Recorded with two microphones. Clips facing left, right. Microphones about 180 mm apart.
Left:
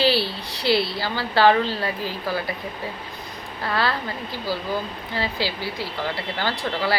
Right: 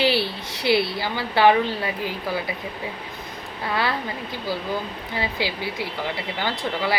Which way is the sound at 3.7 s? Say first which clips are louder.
Left 1 dB; 20° right (ahead or behind).